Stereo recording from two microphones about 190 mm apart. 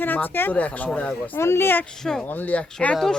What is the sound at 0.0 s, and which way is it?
Speech, 10° left (ahead or behind).